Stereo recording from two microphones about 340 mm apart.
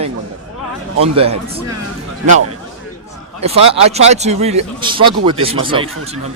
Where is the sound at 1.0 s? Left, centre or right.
Centre.